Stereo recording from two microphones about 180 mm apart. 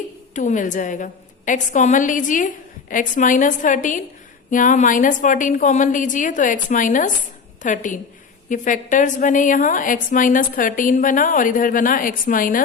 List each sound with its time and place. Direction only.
0.3 s a woman's voice: 45° left (ahead or behind)